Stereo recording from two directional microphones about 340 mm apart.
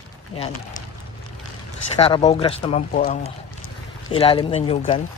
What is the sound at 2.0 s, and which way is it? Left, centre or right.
Speech, centre.